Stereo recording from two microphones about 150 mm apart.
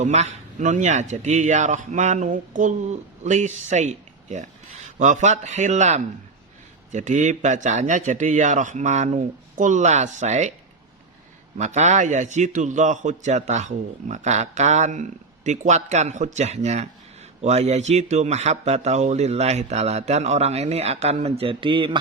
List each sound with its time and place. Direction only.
0.0 s a man's voice: 50° right (ahead or behind)
11.5 s a man's voice: 50° right (ahead or behind); by 21.9 s 35° right (ahead or behind)